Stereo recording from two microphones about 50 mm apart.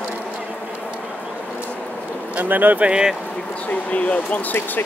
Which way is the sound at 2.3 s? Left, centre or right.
Right.